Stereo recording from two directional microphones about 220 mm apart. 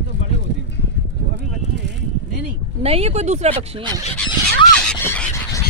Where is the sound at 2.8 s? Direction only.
25° right (ahead or behind).